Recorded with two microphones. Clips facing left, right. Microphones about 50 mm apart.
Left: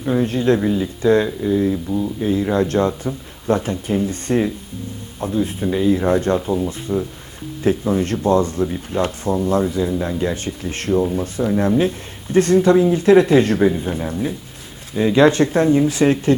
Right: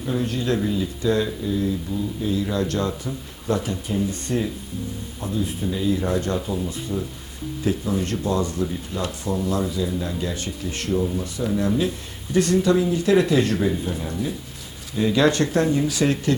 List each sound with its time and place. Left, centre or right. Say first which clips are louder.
0.0 s speech: left 7 dB; left
6.4 s speech: left 6 dB; left
6.7 s speech: left 5 dB; left